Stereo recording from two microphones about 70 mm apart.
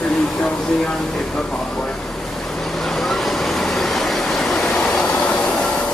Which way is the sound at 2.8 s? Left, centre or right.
Centre.